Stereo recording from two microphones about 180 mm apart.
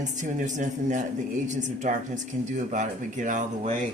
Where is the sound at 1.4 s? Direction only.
45° right (ahead or behind).